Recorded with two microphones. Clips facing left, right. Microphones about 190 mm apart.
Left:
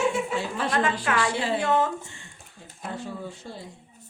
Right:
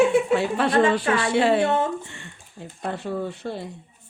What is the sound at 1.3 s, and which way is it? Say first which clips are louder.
Speech: right 8 dB; 65° right (ahead or behind).